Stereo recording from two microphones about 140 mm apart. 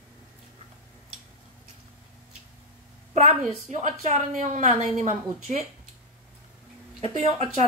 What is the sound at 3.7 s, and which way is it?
Speech, 60° right (ahead or behind).